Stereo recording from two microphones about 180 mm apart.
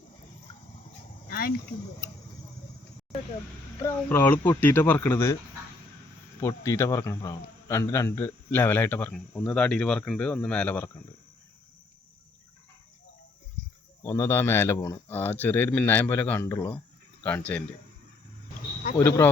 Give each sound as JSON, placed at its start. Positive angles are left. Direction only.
{"t": 1.3, "sound": "speech", "side_deg": 55}
{"t": 3.8, "sound": "a man's voice", "side_deg": 10}
{"t": 6.4, "sound": "a man's voice", "side_deg": 15}
{"t": 14.0, "sound": "a man's voice", "side_deg": 15}
{"t": 18.9, "sound": "a man's voice", "side_deg": 15}